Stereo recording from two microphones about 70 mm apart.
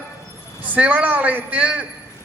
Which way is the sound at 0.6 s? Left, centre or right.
Right.